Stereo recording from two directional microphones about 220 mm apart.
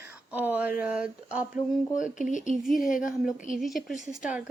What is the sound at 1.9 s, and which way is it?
Speech, 35° left (ahead or behind).